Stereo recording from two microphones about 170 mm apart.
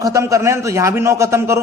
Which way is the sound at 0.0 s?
20° right (ahead or behind).